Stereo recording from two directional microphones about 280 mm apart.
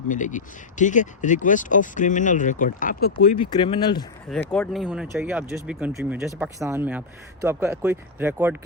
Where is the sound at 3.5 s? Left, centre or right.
Centre.